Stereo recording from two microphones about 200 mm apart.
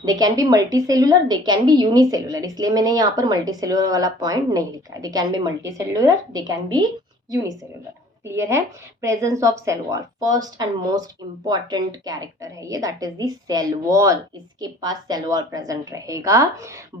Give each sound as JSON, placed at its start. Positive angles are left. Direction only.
{"t": 0.0, "sound": "a woman's voice", "side_deg": -20}
{"t": 8.2, "sound": "a woman's voice", "side_deg": -15}